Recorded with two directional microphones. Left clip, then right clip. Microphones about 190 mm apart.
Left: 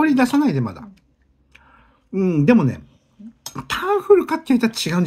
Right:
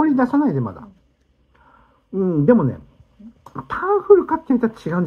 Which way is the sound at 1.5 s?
35° left (ahead or behind).